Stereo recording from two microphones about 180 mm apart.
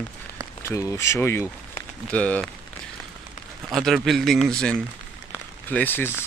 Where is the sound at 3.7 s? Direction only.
Centre (ahead or behind).